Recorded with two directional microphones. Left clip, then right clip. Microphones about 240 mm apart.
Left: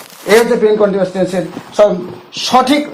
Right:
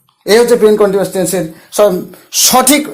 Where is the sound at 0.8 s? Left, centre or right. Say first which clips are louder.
Right 1 dB; right.